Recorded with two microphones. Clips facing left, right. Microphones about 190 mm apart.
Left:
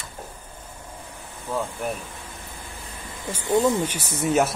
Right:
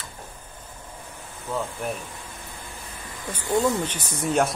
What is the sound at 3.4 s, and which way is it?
Speech, 20° left (ahead or behind).